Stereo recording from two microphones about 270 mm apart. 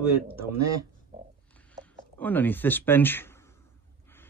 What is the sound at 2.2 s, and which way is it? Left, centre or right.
Speech, centre.